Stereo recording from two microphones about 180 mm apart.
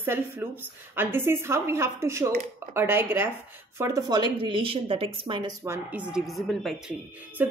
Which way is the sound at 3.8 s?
20° right (ahead or behind).